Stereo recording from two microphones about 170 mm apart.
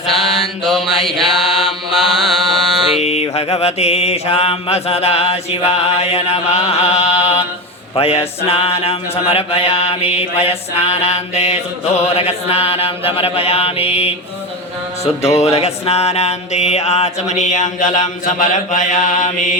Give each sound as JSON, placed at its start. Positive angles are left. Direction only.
{"t": 0.1, "sound": "mantra", "side_deg": 0}
{"t": 3.0, "sound": "mantra", "side_deg": 40}